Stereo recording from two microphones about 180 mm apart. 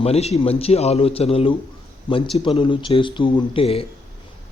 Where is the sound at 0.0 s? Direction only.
35° left (ahead or behind).